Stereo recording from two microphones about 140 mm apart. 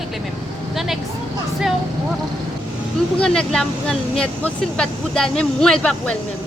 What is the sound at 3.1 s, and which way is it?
Speech, 5° left (ahead or behind).